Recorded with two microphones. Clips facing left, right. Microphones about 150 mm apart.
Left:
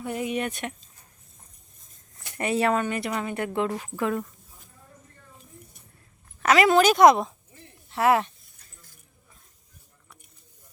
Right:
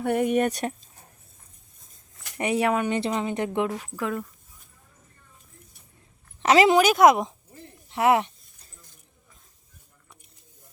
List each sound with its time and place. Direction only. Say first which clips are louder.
0.0 s speech: right 6 dB; 60° right (ahead or behind); by 0.9 s 40° right (ahead or behind)
2.4 s a woman's voice: even; 15° right (ahead or behind)
3.7 s speech: left 2 dB; centre (ahead or behind)
6.4 s speech: right 2 dB; 25° right (ahead or behind)
6.7 s speech: left 1 dB; 5° right (ahead or behind)
7.9 s speech: right 1 dB; 20° right (ahead or behind)